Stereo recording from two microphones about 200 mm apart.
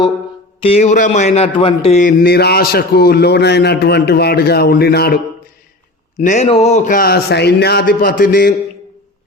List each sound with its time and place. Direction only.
0.6 s a man's voice: 30° left (ahead or behind); by 5.2 s 50° left (ahead or behind)
6.1 s a man's voice: 40° left (ahead or behind)